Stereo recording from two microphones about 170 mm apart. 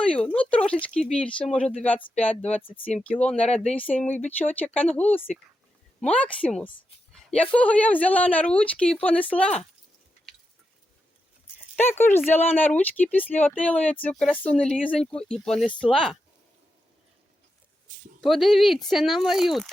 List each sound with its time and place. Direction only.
0.0 s a sound: 5° left (ahead or behind)
0.3 s speech: 5° left (ahead or behind)
2.6 s speech: 30° left (ahead or behind)
3.0 s speech: 10° left (ahead or behind)
11.8 s speech: 10° left (ahead or behind)
18.2 s speech: centre (ahead or behind)